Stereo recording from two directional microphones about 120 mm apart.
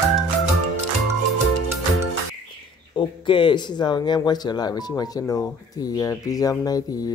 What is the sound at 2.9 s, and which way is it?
A man's voice, 40° left (ahead or behind).